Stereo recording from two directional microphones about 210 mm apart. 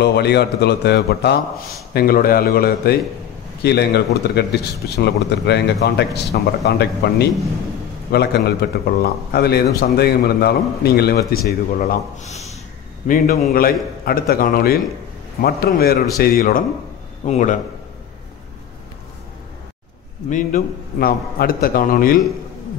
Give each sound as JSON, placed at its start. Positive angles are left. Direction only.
{"t": 0.0, "sound": "a man's voice", "side_deg": 50}
{"t": 20.2, "sound": "a man's voice", "side_deg": 40}